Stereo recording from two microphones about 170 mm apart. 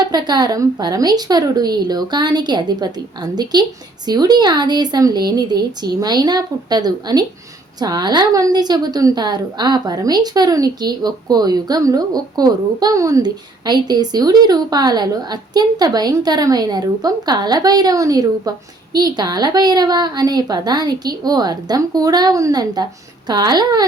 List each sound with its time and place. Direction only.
0.1 s a woman's voice: 25° right (ahead or behind)